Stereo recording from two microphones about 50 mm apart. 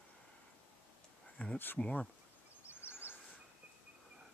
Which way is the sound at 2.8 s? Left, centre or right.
Left.